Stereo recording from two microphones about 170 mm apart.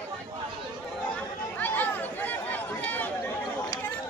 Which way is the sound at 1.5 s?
10° left (ahead or behind).